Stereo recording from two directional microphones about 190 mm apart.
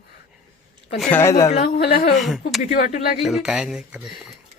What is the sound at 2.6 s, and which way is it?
Speech, 45° left (ahead or behind).